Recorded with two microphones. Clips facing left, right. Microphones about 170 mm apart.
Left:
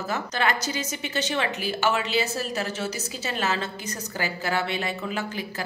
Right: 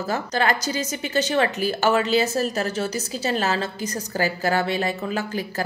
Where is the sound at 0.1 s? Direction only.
35° right (ahead or behind).